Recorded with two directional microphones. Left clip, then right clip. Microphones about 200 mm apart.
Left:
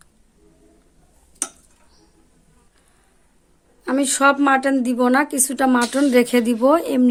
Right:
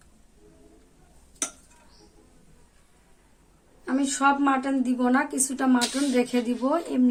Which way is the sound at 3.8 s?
50° left (ahead or behind).